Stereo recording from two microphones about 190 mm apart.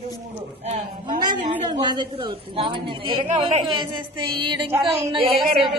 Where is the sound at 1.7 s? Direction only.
20° right (ahead or behind).